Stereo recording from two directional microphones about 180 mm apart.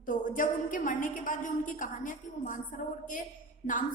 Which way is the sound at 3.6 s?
45° left (ahead or behind).